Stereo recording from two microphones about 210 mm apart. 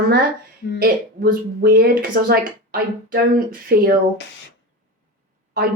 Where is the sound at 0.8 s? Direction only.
45° right (ahead or behind).